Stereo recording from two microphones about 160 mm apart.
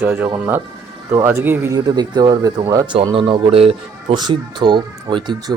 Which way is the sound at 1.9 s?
25° right (ahead or behind).